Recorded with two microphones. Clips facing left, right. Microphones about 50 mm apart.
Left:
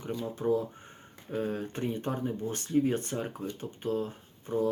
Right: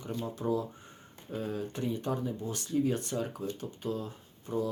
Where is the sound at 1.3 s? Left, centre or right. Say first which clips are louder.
Left 3 dB; left.